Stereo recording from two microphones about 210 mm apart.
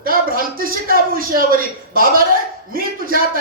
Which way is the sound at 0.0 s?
45° right (ahead or behind).